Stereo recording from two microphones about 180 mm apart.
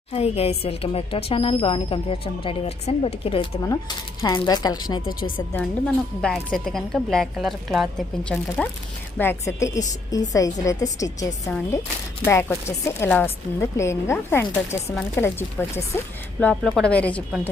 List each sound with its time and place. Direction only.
0.1 s speech: 35° left (ahead or behind)
3.6 s speech: 20° left (ahead or behind)
5.5 s a woman's voice: 5° left (ahead or behind)